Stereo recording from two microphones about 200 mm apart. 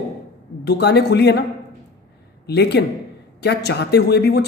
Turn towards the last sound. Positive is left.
turn(degrees=55)  # may be behind; listen again after turning